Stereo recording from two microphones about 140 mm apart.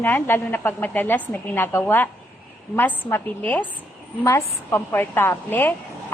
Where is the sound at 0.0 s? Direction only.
15° left (ahead or behind).